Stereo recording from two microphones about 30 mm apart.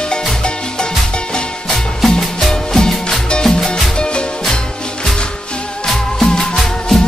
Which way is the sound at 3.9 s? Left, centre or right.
Left.